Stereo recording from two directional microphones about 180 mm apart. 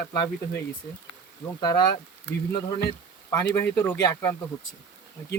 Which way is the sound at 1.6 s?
20° left (ahead or behind).